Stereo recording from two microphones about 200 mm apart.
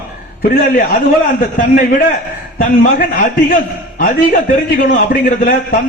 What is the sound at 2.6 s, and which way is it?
A man's voice, 45° left (ahead or behind).